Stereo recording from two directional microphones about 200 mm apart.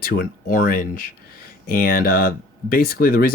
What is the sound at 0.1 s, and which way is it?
Speech, 45° left (ahead or behind).